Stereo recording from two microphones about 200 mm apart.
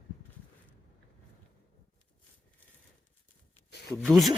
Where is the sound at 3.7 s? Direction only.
60° left (ahead or behind).